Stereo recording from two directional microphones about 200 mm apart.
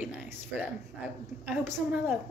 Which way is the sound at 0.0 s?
5° right (ahead or behind).